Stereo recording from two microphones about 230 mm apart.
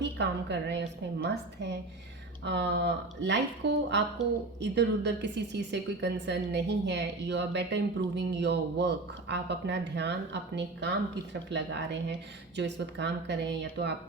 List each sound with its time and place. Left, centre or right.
0.0 s a woman's voice: right